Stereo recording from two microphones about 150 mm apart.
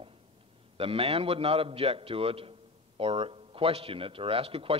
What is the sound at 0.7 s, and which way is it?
A man's voice, 40° right (ahead or behind).